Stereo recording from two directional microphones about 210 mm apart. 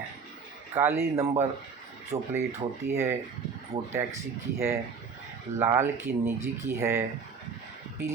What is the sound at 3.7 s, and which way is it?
Speech, 25° right (ahead or behind).